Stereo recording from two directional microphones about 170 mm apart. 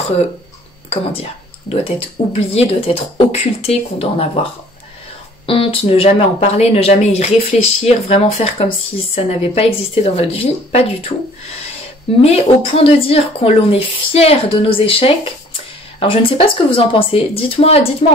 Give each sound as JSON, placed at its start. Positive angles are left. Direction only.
{"t": 2.3, "sound": "speech", "side_deg": 35}
{"t": 5.5, "sound": "speech", "side_deg": 35}
{"t": 12.2, "sound": "speech", "side_deg": 35}